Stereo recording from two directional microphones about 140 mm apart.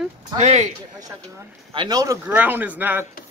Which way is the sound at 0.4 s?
55° right (ahead or behind).